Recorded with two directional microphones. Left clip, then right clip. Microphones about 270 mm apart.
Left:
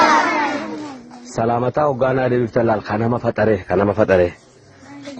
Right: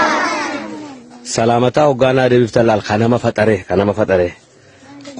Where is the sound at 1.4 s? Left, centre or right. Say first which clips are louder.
Right 5 dB; right; by 4.4 s centre.